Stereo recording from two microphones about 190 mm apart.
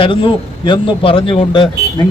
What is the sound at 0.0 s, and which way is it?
Speech, 25° left (ahead or behind).